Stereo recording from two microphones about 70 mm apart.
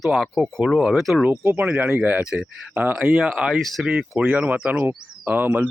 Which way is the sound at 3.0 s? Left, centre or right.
Centre.